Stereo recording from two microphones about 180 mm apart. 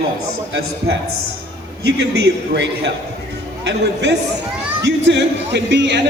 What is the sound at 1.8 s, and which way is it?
A man's voice, 70° right (ahead or behind).